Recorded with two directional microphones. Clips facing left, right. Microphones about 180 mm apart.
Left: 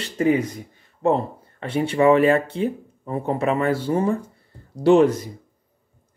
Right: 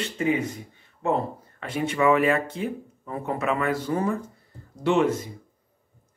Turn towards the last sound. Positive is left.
turn(degrees=35)  # may be behind; listen again after turning